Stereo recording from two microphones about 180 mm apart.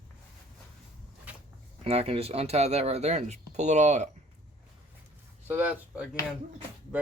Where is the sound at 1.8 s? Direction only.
35° right (ahead or behind).